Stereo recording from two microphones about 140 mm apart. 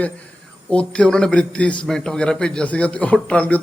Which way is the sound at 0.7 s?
10° left (ahead or behind).